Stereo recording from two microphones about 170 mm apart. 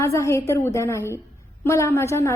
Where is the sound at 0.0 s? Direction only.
15° left (ahead or behind).